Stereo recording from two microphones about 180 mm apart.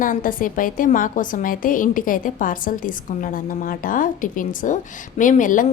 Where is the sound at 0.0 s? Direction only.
50° left (ahead or behind).